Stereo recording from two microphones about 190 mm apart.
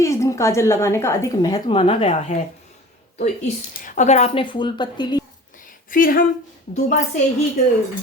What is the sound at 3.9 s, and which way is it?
Speech, 40° left (ahead or behind).